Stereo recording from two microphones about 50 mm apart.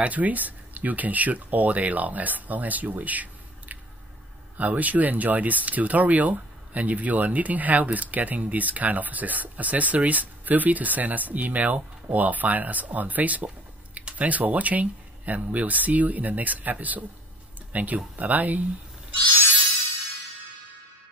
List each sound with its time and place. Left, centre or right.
0.0 s speech: right